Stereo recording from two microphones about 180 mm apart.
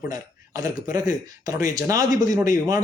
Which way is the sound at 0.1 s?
20° right (ahead or behind).